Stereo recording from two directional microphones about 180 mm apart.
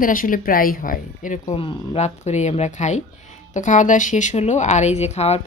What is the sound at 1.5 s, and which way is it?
Speech, 30° left (ahead or behind).